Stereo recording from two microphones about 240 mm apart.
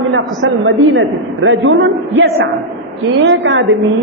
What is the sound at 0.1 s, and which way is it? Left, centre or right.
A man's voice, right.